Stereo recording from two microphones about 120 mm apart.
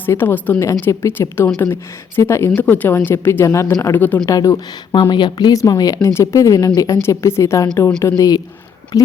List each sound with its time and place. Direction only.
0.0 s a woman's voice: 20° left (ahead or behind)
3.9 s speech: 15° left (ahead or behind)
4.3 s a woman's voice: 30° left (ahead or behind)